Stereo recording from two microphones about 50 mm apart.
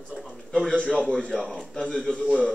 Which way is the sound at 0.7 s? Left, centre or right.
Left.